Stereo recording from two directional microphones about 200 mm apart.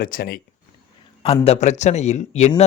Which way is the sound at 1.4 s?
35° left (ahead or behind).